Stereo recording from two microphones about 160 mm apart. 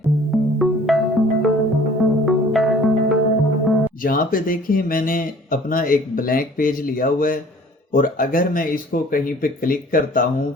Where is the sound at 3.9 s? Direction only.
60° left (ahead or behind).